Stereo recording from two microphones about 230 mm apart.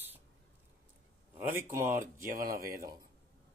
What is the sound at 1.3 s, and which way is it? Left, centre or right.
Speech, centre.